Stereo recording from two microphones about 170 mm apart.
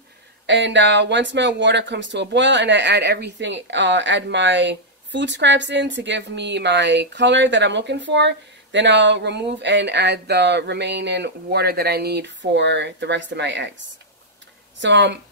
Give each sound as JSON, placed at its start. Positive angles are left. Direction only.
{"t": 0.5, "sound": "speech", "side_deg": -90}
{"t": 14.8, "sound": "speech", "side_deg": -90}